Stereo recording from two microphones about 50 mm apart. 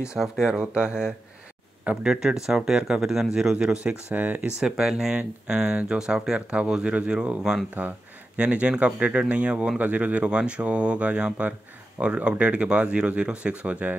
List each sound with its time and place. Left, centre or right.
0.0 s speech: centre
4.1 s speech: right
4.6 s speech: centre
7.8 s speech: right